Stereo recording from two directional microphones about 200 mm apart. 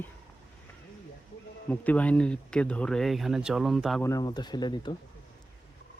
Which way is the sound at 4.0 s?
15° left (ahead or behind).